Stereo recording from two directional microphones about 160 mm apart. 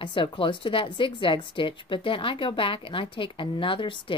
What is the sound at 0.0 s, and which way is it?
A woman's voice, 30° left (ahead or behind).